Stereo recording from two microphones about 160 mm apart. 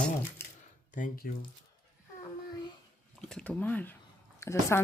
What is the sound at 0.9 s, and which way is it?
Speech, 60° left (ahead or behind).